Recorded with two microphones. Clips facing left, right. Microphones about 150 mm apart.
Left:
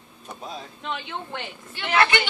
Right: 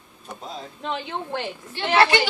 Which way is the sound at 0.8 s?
40° right (ahead or behind).